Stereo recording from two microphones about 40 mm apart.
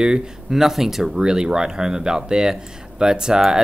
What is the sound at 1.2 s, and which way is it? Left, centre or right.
Speech, right.